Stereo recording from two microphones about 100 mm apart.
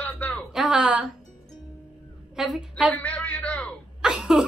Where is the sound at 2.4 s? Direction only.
5° right (ahead or behind).